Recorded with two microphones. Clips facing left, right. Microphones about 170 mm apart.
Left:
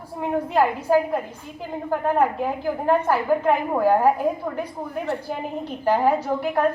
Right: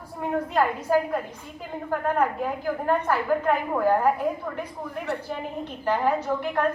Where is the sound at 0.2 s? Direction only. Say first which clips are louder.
Left 3 dB; 25° left (ahead or behind).